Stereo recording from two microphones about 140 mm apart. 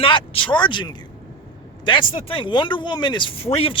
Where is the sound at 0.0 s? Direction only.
40° left (ahead or behind).